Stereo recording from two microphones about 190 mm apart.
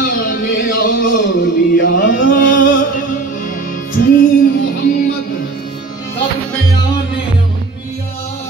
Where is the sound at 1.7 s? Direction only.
45° left (ahead or behind).